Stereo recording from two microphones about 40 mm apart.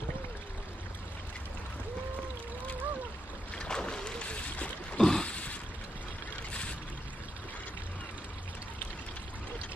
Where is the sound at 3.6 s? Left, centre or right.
Left.